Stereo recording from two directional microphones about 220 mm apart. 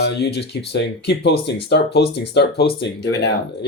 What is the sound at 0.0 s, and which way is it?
Speech, 50° left (ahead or behind).